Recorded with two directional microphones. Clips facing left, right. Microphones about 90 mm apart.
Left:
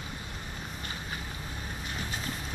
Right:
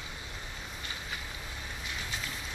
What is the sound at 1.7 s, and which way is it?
Vehicle, 45° left (ahead or behind).